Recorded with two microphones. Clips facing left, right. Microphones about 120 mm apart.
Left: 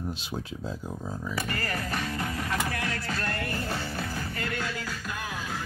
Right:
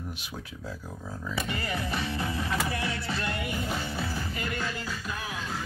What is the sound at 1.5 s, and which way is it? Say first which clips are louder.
Music: right 1 dB; 5° right (ahead or behind).